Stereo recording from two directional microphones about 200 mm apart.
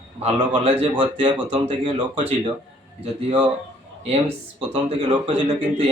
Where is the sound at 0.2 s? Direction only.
30° right (ahead or behind).